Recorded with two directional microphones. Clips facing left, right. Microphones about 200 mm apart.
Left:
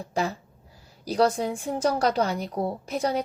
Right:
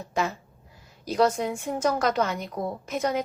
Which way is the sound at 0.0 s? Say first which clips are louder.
Even; 35° left (ahead or behind).